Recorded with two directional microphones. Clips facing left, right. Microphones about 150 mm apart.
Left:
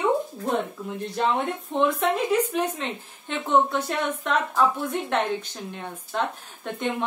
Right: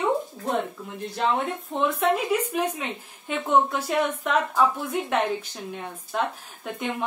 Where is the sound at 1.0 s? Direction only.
Centre (ahead or behind).